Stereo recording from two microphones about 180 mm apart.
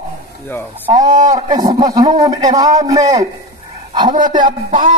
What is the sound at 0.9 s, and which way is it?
Speech, 45° right (ahead or behind).